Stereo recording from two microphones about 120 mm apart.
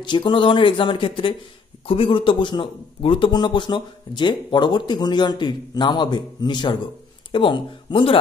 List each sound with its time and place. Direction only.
0.0 s a man's voice: 40° left (ahead or behind)